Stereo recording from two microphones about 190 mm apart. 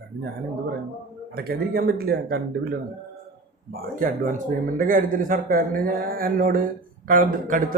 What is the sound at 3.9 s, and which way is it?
Speech, 45° right (ahead or behind).